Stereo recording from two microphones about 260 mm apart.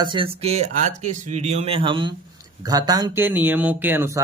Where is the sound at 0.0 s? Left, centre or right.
Centre.